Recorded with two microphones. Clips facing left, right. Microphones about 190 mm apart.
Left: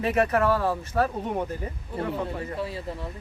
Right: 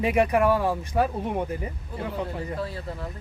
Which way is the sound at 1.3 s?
Centre (ahead or behind).